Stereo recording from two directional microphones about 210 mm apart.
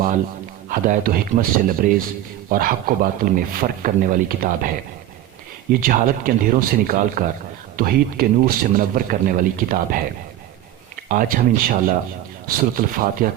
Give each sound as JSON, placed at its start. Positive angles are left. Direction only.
{"t": 0.7, "sound": "speech", "side_deg": -40}
{"t": 5.8, "sound": "a man's voice", "side_deg": -40}
{"t": 11.1, "sound": "speech", "side_deg": -40}